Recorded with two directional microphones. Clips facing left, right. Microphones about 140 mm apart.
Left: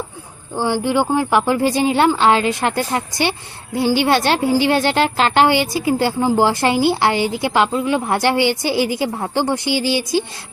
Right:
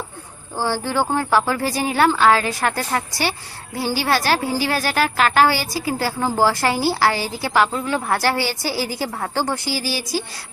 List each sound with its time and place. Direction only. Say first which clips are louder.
0.5 s a woman's voice: left 4 dB; 15° left (ahead or behind)